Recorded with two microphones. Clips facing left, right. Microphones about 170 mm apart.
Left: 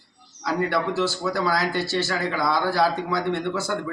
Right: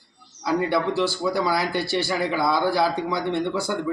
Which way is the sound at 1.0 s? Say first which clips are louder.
Right 1 dB; 15° right (ahead or behind).